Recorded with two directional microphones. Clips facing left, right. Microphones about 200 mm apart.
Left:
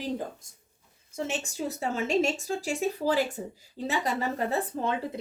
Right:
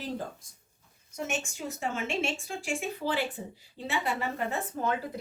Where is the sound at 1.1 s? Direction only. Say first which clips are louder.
Left 2 dB; 30° left (ahead or behind).